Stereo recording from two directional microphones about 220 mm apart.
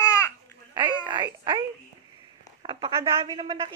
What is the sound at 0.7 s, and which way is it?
Speech, 20° right (ahead or behind).